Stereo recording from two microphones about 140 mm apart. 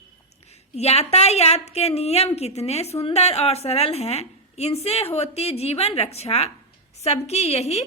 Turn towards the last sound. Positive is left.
turn(degrees=50)  # may be behind; listen again after turning